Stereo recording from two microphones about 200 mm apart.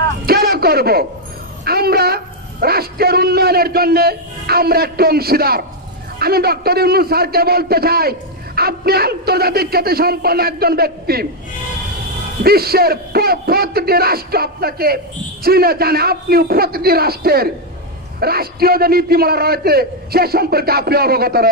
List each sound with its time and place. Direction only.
0.3 s a sound: 50° right (ahead or behind)
1.6 s a man's voice: 50° right (ahead or behind)
12.4 s a man's voice: 50° right (ahead or behind)